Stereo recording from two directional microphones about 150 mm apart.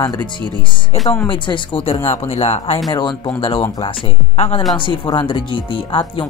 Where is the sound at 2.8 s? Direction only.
30° left (ahead or behind).